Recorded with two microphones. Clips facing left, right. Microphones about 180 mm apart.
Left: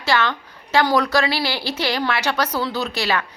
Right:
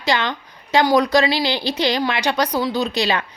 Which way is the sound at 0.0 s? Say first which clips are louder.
Even; 15° right (ahead or behind).